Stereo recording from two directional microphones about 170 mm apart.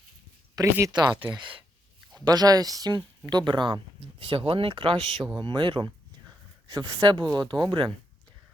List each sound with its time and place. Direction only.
0.5 s speech: 20° right (ahead or behind)
4.9 s speech: centre (ahead or behind)
5.4 s speech: 30° right (ahead or behind)